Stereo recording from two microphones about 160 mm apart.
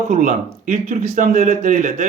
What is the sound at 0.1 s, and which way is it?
Speech, 50° right (ahead or behind).